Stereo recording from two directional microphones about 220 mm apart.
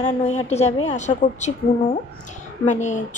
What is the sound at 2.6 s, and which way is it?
Speech, 35° left (ahead or behind).